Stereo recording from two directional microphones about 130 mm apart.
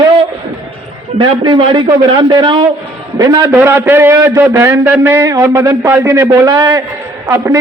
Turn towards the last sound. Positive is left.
turn(degrees=-20)  # may be behind; listen again after turning